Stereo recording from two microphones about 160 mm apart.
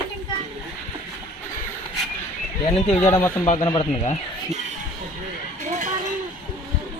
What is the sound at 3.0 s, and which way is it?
Speech, 15° left (ahead or behind).